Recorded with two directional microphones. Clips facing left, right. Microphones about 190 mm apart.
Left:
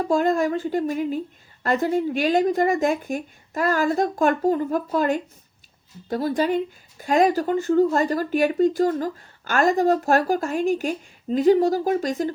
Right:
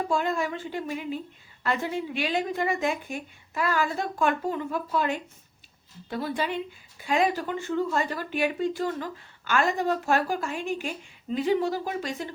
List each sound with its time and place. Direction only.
0.1 s speech: 45° left (ahead or behind)